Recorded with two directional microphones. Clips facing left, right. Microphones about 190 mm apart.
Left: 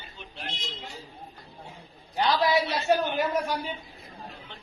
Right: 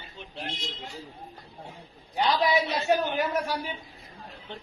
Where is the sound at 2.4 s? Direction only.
Centre (ahead or behind).